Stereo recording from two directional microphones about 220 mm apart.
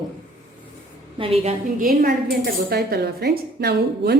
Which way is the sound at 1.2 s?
25° right (ahead or behind).